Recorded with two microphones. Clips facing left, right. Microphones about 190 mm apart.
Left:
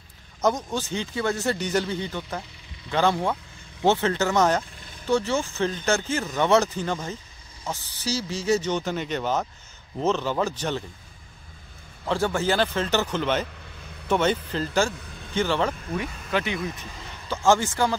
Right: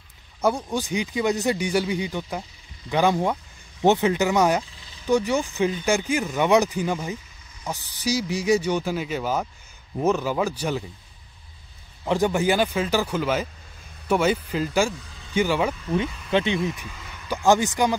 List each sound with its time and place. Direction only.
0.4 s speech: 10° right (ahead or behind)
12.1 s speech: 15° right (ahead or behind)
15.0 s a sound: 55° left (ahead or behind)
15.3 s speech: 10° right (ahead or behind)
16.3 s speech: 25° right (ahead or behind)